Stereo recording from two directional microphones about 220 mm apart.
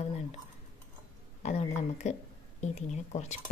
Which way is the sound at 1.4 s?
30° left (ahead or behind).